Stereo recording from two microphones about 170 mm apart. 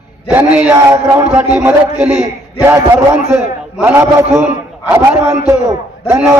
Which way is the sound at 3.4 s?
10° right (ahead or behind).